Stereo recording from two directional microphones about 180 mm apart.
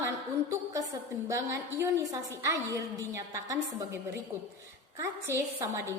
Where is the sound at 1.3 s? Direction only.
15° right (ahead or behind).